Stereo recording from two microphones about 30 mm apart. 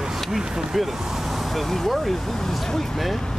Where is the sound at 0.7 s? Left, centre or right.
Centre.